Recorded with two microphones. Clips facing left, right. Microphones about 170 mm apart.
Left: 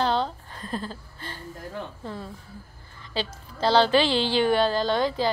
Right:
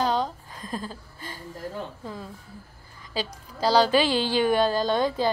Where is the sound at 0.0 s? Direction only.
10° right (ahead or behind).